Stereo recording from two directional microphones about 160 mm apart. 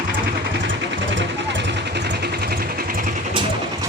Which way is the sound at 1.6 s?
90° right.